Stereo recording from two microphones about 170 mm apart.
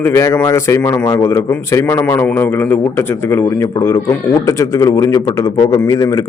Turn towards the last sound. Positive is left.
turn(degrees=20)  # may be behind; listen again after turning